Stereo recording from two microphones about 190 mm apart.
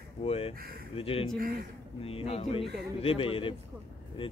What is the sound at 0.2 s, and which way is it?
A man's voice, 30° left (ahead or behind).